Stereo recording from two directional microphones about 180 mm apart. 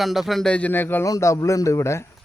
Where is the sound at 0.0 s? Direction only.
Centre (ahead or behind); by 2.0 s 15° left (ahead or behind).